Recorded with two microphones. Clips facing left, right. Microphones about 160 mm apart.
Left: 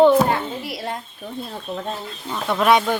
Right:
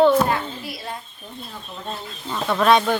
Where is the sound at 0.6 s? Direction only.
75° left (ahead or behind).